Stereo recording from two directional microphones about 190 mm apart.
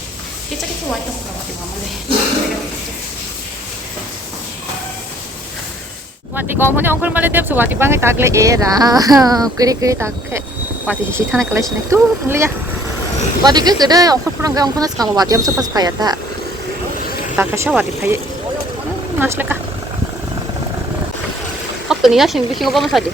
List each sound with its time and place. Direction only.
6.3 s speech: 10° right (ahead or behind)
17.3 s speech: 15° right (ahead or behind)
19.2 s speech: 10° right (ahead or behind)
21.8 s speech: centre (ahead or behind)